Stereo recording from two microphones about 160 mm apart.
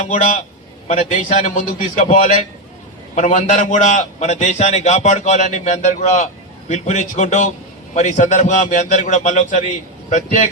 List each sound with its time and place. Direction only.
0.0 s a man's voice: 50° left (ahead or behind)